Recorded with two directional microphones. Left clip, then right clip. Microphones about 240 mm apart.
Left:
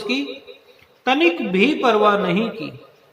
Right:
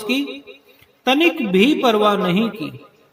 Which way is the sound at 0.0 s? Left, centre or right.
Right.